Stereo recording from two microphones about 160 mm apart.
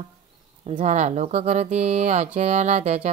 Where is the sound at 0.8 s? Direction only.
50° right (ahead or behind).